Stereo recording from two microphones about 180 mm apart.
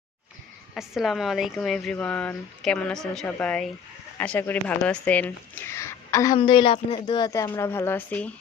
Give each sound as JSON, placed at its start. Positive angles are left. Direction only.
{"t": 0.7, "sound": "speech", "side_deg": 0}
{"t": 7.3, "sound": "speech", "side_deg": 15}